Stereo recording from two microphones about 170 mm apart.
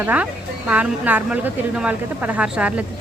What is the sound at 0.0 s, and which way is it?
A woman's voice, 10° right (ahead or behind).